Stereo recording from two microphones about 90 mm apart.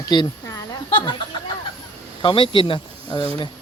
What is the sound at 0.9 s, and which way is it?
A man's voice, 65° left (ahead or behind).